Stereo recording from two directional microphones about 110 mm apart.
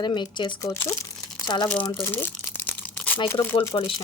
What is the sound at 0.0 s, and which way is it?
Speech, 45° left (ahead or behind).